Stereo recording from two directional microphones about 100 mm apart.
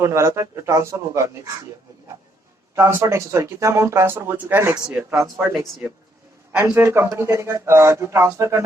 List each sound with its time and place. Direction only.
0.0 s speech: 30° right (ahead or behind)
2.7 s speech: 25° right (ahead or behind)
5.4 s speech: centre (ahead or behind)
6.5 s speech: 20° right (ahead or behind)